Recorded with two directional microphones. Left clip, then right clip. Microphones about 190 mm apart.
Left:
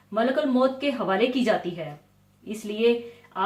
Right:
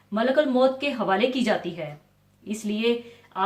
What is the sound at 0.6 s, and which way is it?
Speech, 35° right (ahead or behind).